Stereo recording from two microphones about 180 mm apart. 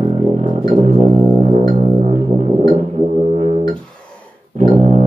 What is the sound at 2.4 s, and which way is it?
Music, 40° right (ahead or behind).